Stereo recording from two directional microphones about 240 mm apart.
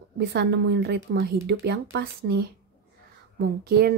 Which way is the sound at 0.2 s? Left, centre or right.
Right.